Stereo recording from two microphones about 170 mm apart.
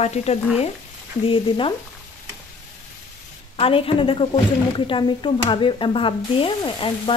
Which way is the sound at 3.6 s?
30° left (ahead or behind).